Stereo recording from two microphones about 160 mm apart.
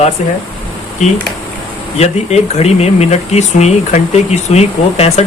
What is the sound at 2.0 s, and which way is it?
Speech, 40° left (ahead or behind).